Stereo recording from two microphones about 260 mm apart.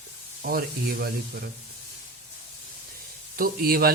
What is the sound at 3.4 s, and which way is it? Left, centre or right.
Speech, right.